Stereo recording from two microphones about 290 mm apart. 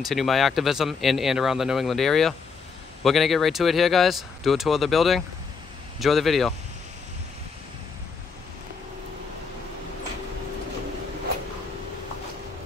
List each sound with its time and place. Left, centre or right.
0.0 s speech: centre